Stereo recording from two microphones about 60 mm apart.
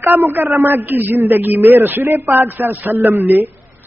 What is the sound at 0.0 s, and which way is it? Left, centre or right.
A man's voice, right.